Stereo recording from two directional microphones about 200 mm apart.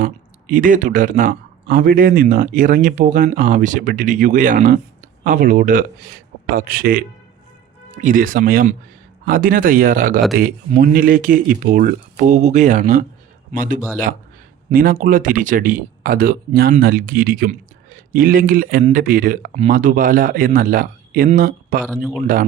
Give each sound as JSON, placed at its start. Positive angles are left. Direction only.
{"t": 0.0, "sound": "speech", "side_deg": -40}